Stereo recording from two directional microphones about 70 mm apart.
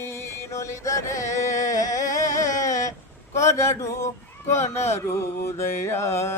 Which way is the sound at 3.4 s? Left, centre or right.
Left.